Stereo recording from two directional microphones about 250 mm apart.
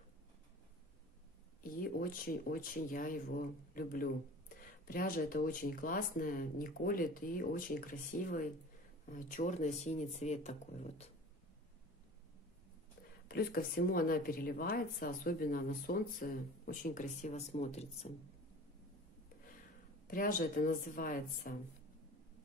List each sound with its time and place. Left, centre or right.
1.6 s speech: left
13.3 s speech: left
20.1 s speech: left